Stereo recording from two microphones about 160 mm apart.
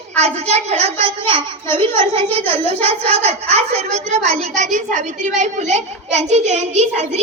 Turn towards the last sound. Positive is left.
turn(degrees=-45)  # may be behind; listen again after turning